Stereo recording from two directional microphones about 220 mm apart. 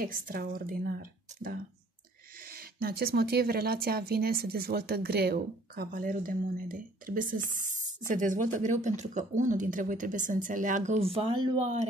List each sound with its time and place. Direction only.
0.0 s speech: 40° right (ahead or behind)